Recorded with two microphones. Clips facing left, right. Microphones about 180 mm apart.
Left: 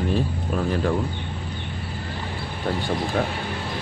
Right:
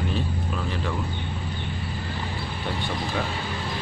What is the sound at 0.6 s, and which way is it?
Speech, 45° left (ahead or behind).